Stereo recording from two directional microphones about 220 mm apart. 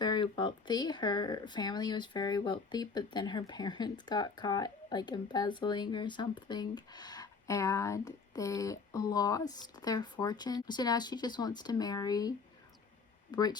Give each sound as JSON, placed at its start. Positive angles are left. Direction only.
{"t": 0.0, "sound": "speech", "side_deg": 20}
{"t": 13.3, "sound": "speech", "side_deg": 20}